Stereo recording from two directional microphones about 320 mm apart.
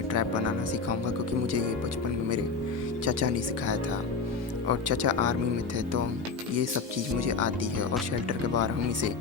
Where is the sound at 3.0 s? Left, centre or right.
Right.